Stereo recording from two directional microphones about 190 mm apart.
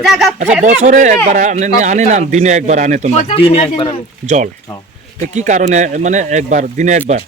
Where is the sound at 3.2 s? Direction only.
30° left (ahead or behind).